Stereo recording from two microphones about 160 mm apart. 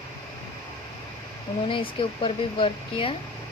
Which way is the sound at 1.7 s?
30° left (ahead or behind).